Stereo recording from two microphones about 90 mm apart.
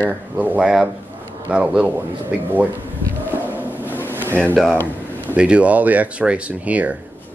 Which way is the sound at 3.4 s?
20° right (ahead or behind).